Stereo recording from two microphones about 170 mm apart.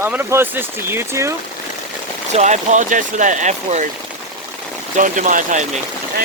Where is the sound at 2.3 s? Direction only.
45° right (ahead or behind).